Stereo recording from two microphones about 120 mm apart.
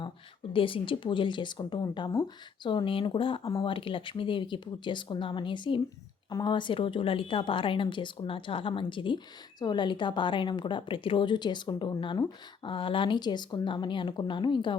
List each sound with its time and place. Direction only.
0.5 s a woman's voice: 45° left (ahead or behind)